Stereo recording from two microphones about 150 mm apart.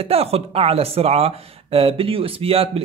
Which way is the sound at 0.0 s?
40° right (ahead or behind).